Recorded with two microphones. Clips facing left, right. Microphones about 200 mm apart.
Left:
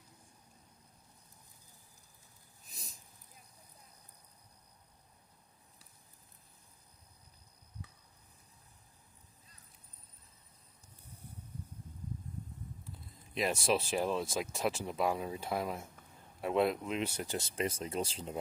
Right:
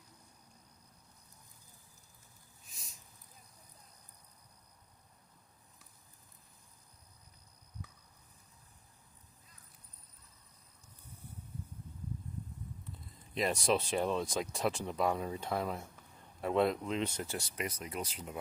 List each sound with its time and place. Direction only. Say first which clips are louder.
2.6 s a sound: left 4 dB; 35° left (ahead or behind)
13.3 s speech: even; centre (ahead or behind)
17.3 s speech: left 4 dB; 25° left (ahead or behind)